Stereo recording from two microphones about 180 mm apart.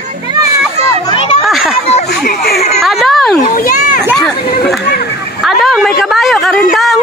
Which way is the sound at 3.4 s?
50° left (ahead or behind).